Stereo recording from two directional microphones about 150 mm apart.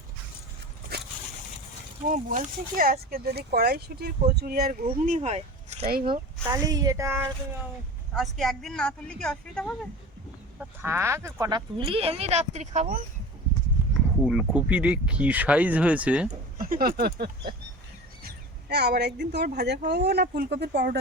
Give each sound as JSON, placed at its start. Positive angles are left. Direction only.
{"t": 2.0, "sound": "speech", "side_deg": -60}
{"t": 6.1, "sound": "speech", "side_deg": -25}
{"t": 8.1, "sound": "speech", "side_deg": 0}
{"t": 10.8, "sound": "speech", "side_deg": -15}
{"t": 14.2, "sound": "speech", "side_deg": -5}
{"t": 16.3, "sound": "speech", "side_deg": -65}
{"t": 18.7, "sound": "speech", "side_deg": -90}